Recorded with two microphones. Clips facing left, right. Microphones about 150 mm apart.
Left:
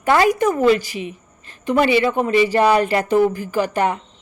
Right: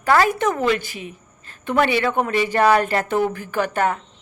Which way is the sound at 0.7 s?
50° right (ahead or behind).